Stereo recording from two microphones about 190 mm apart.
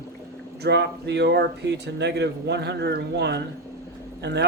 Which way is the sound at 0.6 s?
65° right (ahead or behind).